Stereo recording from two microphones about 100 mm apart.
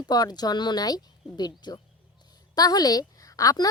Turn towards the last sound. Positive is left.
turn(degrees=35)  # may be behind; listen again after turning